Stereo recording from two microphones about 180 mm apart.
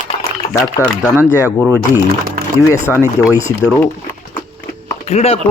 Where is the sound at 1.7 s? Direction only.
10° left (ahead or behind).